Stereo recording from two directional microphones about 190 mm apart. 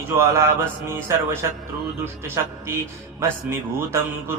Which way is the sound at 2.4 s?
15° right (ahead or behind).